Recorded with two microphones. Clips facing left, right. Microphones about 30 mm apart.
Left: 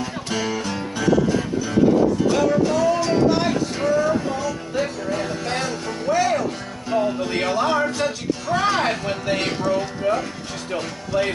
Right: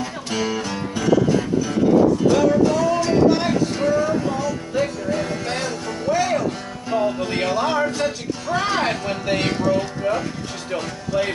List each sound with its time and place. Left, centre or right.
0.0 s music: centre
10.7 s speech: centre